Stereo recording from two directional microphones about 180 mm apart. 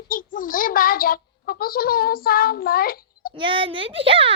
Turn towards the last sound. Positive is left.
turn(degrees=-30)  # may be behind; listen again after turning